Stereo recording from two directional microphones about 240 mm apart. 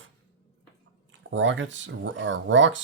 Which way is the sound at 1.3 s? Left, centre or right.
Right.